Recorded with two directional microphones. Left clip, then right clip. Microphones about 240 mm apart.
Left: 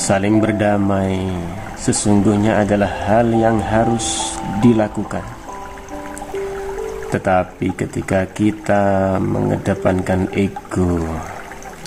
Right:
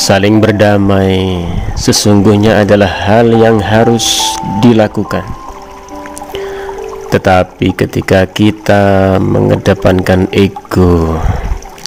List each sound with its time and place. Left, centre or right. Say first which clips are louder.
0.0 s speech: right 8 dB; right
7.1 s speech: right 9 dB; right